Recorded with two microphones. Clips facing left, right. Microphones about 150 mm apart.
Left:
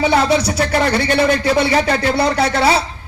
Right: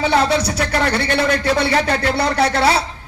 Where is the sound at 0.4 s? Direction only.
25° left (ahead or behind).